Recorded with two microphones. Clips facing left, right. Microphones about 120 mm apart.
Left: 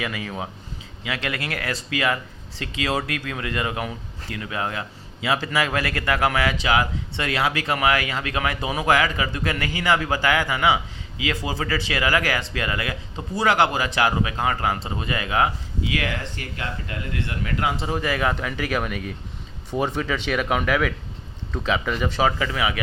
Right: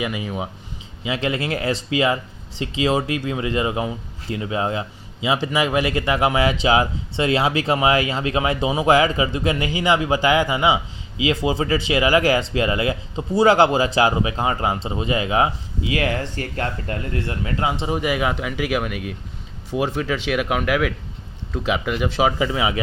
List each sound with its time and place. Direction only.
0.0 s speech: 20° right (ahead or behind)
22.3 s speech: 20° right (ahead or behind)